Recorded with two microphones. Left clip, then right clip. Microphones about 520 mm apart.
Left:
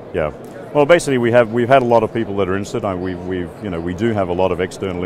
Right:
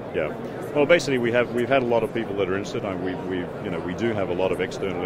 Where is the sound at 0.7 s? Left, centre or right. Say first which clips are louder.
Left 6 dB; left.